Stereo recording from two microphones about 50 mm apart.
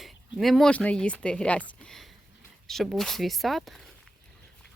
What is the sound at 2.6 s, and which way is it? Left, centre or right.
Speech, centre.